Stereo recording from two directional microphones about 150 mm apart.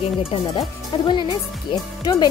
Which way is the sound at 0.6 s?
30° left (ahead or behind).